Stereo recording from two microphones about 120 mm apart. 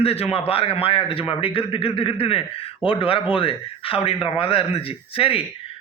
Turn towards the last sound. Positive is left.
turn(degrees=50)  # may be behind; listen again after turning